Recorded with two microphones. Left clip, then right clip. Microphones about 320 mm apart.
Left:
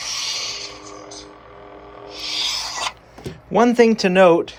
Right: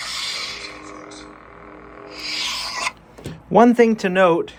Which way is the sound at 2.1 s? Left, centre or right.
Centre.